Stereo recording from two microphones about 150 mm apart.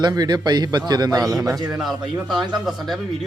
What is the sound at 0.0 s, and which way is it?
A man's voice, 25° right (ahead or behind).